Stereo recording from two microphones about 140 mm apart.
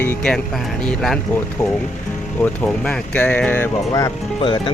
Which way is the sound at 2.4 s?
10° left (ahead or behind).